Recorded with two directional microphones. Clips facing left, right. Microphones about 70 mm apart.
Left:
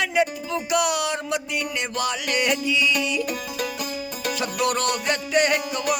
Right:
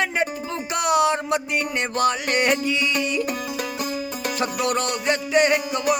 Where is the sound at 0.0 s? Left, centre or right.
Right.